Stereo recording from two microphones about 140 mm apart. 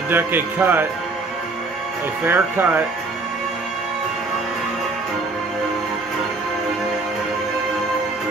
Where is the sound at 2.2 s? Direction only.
15° right (ahead or behind).